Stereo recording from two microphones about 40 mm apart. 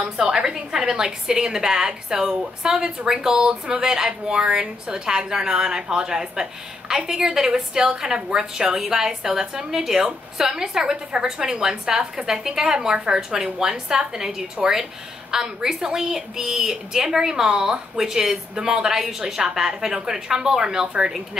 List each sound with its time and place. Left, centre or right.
0.0 s a woman's voice: centre